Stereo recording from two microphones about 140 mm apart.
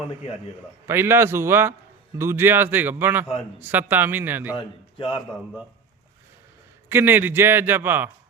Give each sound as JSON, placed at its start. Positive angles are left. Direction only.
{"t": 0.9, "sound": "a man's voice", "side_deg": -15}
{"t": 4.5, "sound": "a man's voice", "side_deg": 35}
{"t": 6.8, "sound": "a man's voice", "side_deg": -15}